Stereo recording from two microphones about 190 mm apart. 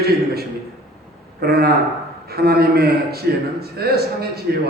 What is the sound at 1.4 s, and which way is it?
A man's voice, 55° right (ahead or behind).